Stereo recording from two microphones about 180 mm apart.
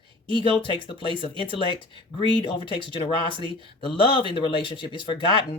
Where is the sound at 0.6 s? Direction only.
25° left (ahead or behind).